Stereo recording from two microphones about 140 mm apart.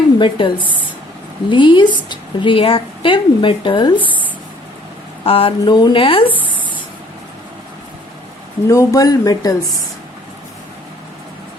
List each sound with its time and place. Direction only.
0.2 s speech: 40° left (ahead or behind)
5.2 s speech: 40° left (ahead or behind)
8.6 s speech: 20° left (ahead or behind)